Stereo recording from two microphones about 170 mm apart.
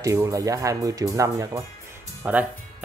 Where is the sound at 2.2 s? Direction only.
10° right (ahead or behind).